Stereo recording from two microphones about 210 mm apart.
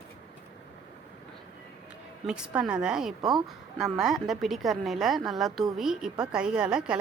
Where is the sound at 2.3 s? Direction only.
5° right (ahead or behind).